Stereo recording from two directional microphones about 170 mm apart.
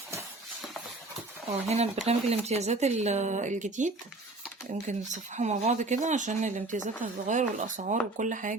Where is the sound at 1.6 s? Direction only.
40° right (ahead or behind).